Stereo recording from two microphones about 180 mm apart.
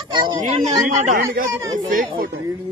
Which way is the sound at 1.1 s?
50° right (ahead or behind).